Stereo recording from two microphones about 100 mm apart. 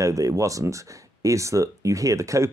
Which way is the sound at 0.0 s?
30° right (ahead or behind).